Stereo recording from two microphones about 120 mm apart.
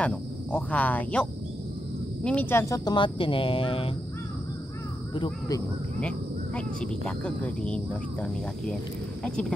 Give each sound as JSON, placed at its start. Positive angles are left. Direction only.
{"t": 0.0, "sound": "speech", "side_deg": 10}
{"t": 2.2, "sound": "speech", "side_deg": 15}
{"t": 5.9, "sound": "speech", "side_deg": 10}